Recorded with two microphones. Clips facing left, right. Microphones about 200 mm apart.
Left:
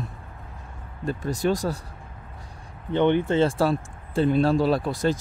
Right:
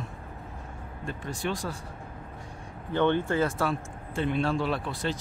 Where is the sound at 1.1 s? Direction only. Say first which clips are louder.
Left 8 dB; 40° left (ahead or behind).